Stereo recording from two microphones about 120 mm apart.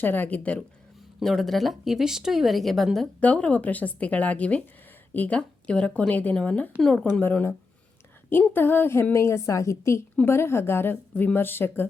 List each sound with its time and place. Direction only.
0.0 s a woman's voice: 15° left (ahead or behind)
1.2 s a woman's voice: centre (ahead or behind); by 11.9 s 15° left (ahead or behind)